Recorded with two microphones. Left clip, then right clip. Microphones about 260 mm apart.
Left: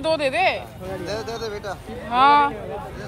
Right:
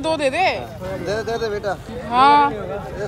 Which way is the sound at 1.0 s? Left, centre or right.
Right.